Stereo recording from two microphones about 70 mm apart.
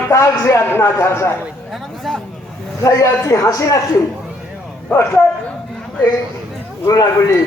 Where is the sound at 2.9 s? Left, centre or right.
Left.